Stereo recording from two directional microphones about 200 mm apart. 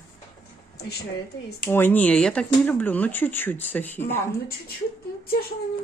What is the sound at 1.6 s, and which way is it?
Speech, 10° left (ahead or behind).